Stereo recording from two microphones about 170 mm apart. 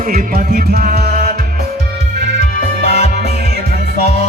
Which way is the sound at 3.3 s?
65° right (ahead or behind).